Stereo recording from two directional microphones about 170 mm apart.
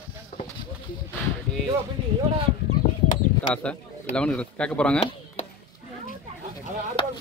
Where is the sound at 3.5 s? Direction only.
5° left (ahead or behind).